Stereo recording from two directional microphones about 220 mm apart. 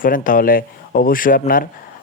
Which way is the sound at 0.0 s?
40° left (ahead or behind).